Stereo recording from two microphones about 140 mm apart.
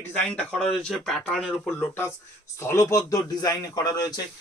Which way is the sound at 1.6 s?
15° left (ahead or behind).